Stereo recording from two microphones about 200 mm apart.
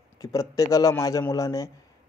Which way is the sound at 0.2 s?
15° left (ahead or behind).